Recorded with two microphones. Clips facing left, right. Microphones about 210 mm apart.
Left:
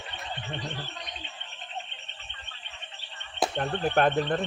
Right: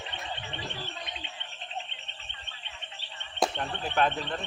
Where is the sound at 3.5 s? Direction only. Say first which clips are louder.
Left 5 dB; 45° left (ahead or behind).